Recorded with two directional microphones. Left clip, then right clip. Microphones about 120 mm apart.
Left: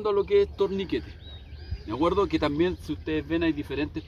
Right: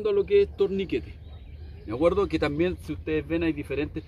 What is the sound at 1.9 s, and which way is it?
Speech, 5° left (ahead or behind).